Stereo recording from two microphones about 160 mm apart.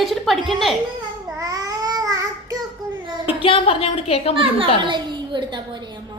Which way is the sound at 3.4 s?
35° left (ahead or behind).